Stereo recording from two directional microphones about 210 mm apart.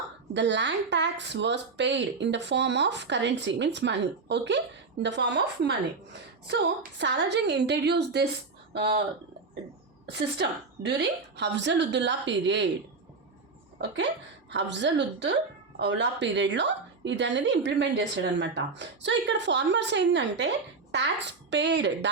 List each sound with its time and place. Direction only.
0.3 s a woman's voice: 55° right (ahead or behind)
10.1 s a woman's voice: 55° right (ahead or behind)
14.5 s a woman's voice: 55° right (ahead or behind)
21.5 s a woman's voice: 55° right (ahead or behind)